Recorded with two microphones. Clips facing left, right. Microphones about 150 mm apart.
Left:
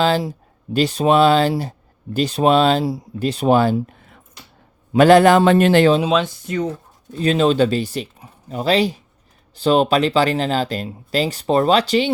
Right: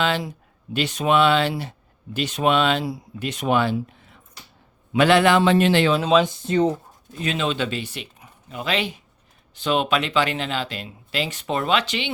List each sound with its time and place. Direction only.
0.0 s speech: 35° left (ahead or behind); by 4.2 s 50° left (ahead or behind)
4.9 s a man's voice: 40° left (ahead or behind)
6.2 s speech: 25° right (ahead or behind)
7.1 s speech: 35° left (ahead or behind)